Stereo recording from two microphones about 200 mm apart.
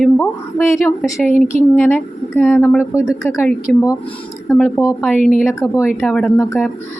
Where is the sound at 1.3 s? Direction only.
40° left (ahead or behind).